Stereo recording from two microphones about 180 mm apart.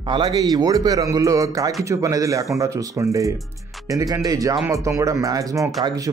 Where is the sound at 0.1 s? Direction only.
25° right (ahead or behind).